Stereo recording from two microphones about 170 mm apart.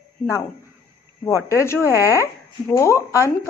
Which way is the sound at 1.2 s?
15° left (ahead or behind).